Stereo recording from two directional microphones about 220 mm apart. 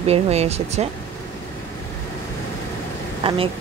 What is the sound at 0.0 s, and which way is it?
Speech, 30° right (ahead or behind).